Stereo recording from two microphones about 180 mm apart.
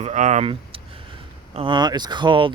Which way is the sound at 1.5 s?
30° right (ahead or behind).